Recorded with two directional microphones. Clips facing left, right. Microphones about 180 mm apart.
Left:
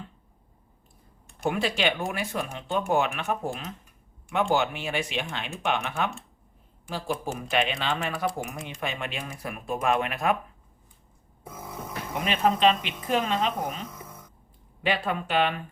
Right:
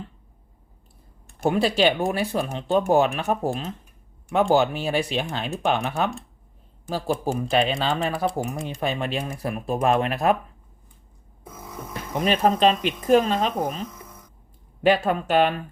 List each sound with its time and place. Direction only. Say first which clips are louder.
1.5 s speech: right 6 dB; 35° right (ahead or behind)
12.1 s speech: right 4 dB; 40° right (ahead or behind)
14.8 s speech: right 8 dB; 45° right (ahead or behind)